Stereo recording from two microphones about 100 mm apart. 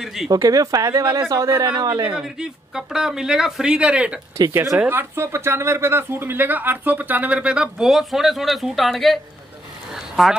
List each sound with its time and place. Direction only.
0.0 s speech: 5° right (ahead or behind)
0.3 s speech: 35° right (ahead or behind)
1.8 s a man's voice: 50° right (ahead or behind)
2.1 s speech: 5° right (ahead or behind)
9.9 s a sound: centre (ahead or behind)